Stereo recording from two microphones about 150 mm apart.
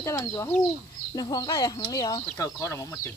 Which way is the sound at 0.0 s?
20° left (ahead or behind).